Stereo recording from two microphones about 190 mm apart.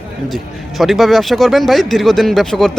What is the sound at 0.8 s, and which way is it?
A man's voice, centre (ahead or behind).